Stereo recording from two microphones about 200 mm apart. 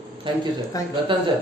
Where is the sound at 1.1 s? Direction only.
25° right (ahead or behind).